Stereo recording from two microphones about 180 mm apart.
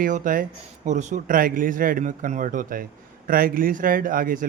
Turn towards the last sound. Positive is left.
turn(degrees=-50)  # may be behind; listen again after turning